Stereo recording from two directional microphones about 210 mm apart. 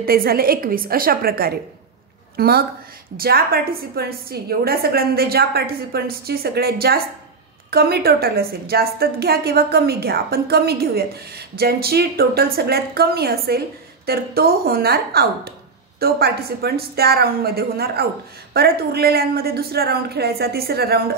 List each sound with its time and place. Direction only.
0.0 s a woman's voice: 45° right (ahead or behind)